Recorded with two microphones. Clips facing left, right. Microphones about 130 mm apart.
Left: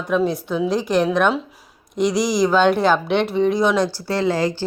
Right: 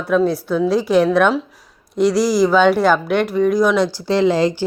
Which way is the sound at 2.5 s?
5° right (ahead or behind).